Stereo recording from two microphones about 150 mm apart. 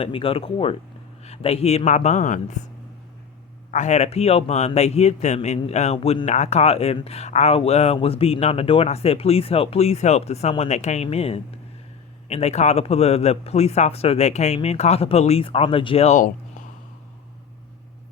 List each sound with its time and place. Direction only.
0.0 s speech: 35° left (ahead or behind); by 2.6 s 55° left (ahead or behind)
3.7 s speech: 50° left (ahead or behind)